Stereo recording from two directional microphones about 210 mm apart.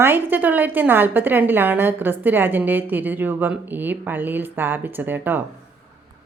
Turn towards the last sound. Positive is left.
turn(degrees=-10)  # may be behind; listen again after turning